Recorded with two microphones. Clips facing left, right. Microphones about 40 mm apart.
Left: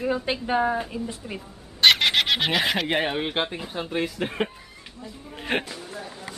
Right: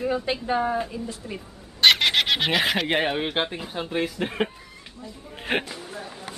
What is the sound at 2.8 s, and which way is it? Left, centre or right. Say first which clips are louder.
Speech: right 1 dB; centre.